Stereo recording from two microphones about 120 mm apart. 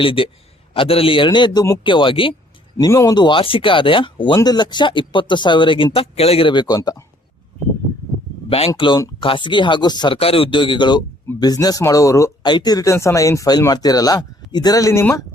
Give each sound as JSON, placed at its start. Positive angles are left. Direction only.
{"t": 0.0, "sound": "speech", "side_deg": 45}
{"t": 2.7, "sound": "speech", "side_deg": 25}
{"t": 8.4, "sound": "speech", "side_deg": 55}
{"t": 9.2, "sound": "speech", "side_deg": 45}
{"t": 10.2, "sound": "speech", "side_deg": 50}
{"t": 12.4, "sound": "speech", "side_deg": 40}